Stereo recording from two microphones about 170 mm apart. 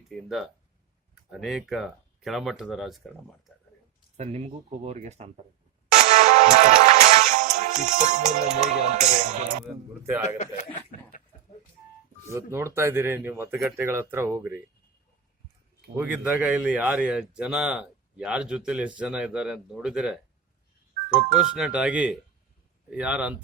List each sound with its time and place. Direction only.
0.1 s speech: centre (ahead or behind)
4.2 s speech: 40° right (ahead or behind)
5.9 s music: 45° right (ahead or behind)
10.2 s speech: 40° left (ahead or behind)
12.3 s speech: 15° right (ahead or behind)
16.0 s speech: 10° right (ahead or behind)